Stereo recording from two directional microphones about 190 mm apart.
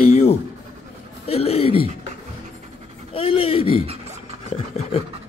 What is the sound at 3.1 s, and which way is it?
Speech, 30° left (ahead or behind).